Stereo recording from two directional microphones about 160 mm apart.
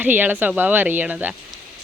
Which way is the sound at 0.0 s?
10° right (ahead or behind).